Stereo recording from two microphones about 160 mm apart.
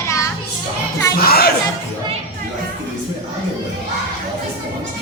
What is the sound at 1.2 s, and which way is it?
Crowd, 70° left (ahead or behind).